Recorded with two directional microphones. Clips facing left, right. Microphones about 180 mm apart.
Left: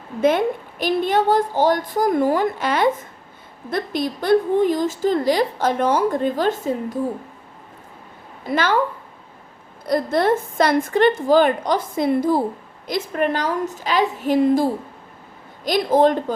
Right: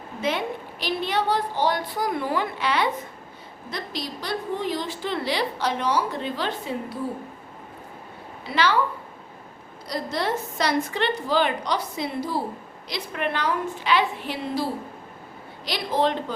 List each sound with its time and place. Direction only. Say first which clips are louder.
0.2 s a woman's voice: left 9 dB; 50° left (ahead or behind)
8.4 s a woman's voice: left 3 dB; 50° left (ahead or behind)
9.8 s a woman's voice: left 9 dB; 50° left (ahead or behind)